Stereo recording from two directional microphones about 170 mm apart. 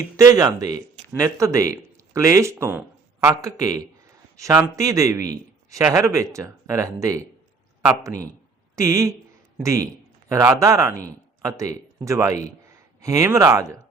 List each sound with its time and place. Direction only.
0.2 s speech: 20° right (ahead or behind)
8.7 s speech: 15° right (ahead or behind)
10.2 s speech: 20° right (ahead or behind)